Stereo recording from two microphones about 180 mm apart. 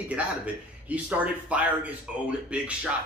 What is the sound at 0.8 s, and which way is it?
A man's voice, 10° right (ahead or behind).